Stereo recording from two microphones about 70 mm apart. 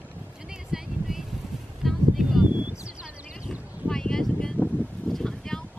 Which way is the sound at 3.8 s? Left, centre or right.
Centre.